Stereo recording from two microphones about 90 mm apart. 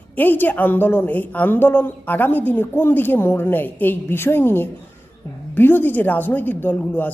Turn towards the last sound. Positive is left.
turn(degrees=15)  # may be behind; listen again after turning